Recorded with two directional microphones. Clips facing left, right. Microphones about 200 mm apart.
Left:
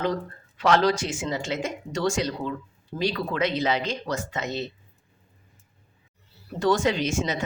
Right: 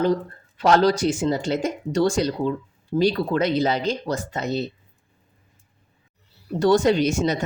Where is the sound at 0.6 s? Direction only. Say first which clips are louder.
Right 4 dB; 35° right (ahead or behind).